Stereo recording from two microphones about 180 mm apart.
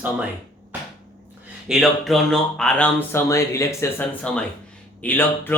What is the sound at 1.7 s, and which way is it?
Speech, centre (ahead or behind).